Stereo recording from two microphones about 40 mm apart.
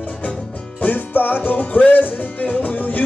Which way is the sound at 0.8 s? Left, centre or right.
Left.